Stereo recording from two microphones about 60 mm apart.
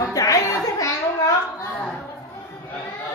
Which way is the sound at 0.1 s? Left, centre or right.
Left.